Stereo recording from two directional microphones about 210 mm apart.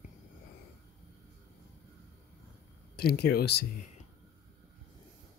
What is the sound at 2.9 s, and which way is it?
Speech, 50° left (ahead or behind).